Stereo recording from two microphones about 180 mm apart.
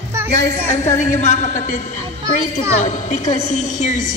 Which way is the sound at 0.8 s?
40° left (ahead or behind).